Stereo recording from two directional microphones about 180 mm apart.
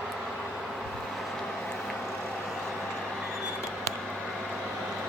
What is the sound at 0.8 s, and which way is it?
Vehicle, centre (ahead or behind).